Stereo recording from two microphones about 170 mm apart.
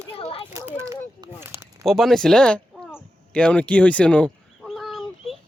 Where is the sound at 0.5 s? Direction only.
15° right (ahead or behind).